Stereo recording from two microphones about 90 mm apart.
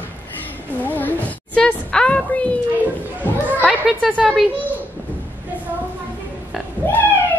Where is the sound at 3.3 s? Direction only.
25° left (ahead or behind).